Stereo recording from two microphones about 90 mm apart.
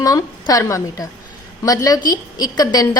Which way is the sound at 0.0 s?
40° left (ahead or behind).